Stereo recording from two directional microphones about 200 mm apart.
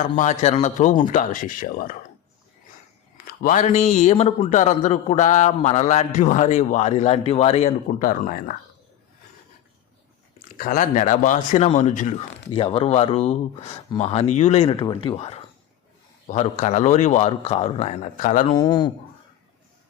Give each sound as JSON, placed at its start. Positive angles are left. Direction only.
{"t": 0.2, "sound": "speech", "side_deg": 35}
{"t": 3.2, "sound": "speech", "side_deg": 40}
{"t": 10.6, "sound": "speech", "side_deg": 45}
{"t": 18.4, "sound": "a man's voice", "side_deg": 20}